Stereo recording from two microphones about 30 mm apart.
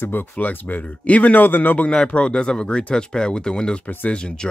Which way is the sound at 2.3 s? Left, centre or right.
Left.